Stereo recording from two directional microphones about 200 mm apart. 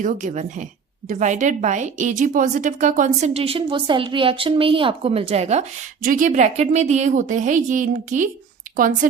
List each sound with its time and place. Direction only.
0.0 s a woman's voice: 40° right (ahead or behind)